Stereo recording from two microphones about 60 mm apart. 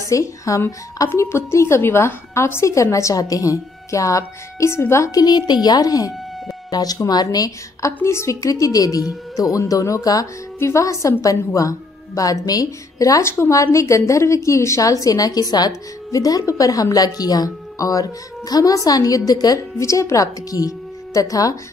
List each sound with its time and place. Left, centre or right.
0.0 s a woman's voice: left
4.6 s a woman's voice: left
5.8 s a woman's voice: left
8.0 s a woman's voice: left
10.6 s a woman's voice: left
12.2 s speech: left
13.2 s a woman's voice: left
13.5 s a woman's voice: left